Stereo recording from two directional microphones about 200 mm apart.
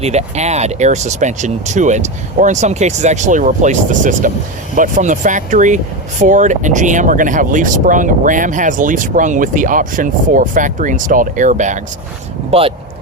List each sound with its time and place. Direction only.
0.0 s speech: 35° right (ahead or behind)